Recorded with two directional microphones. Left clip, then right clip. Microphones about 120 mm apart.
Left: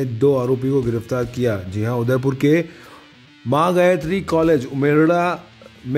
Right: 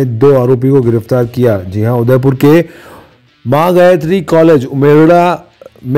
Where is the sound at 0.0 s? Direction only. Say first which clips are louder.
Right 10 dB; 35° right (ahead or behind).